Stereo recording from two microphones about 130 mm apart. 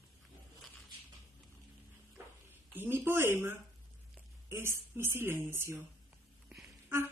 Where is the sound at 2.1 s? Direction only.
15° right (ahead or behind).